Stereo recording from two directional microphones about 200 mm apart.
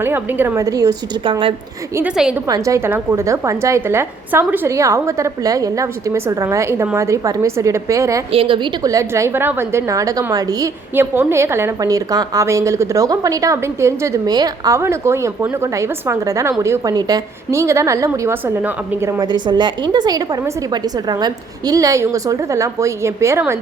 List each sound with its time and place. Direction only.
0.0 s a woman's voice: 10° right (ahead or behind); by 1.5 s 25° right (ahead or behind)
2.0 s a woman's voice: 5° right (ahead or behind)
2.5 s a woman's voice: 15° right (ahead or behind)
8.3 s a woman's voice: 25° right (ahead or behind)